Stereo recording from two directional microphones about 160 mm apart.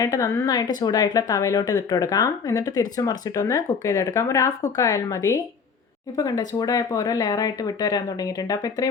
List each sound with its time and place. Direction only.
0.0 s speech: 20° left (ahead or behind)